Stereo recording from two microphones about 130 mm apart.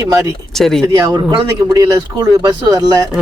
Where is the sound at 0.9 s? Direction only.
25° right (ahead or behind).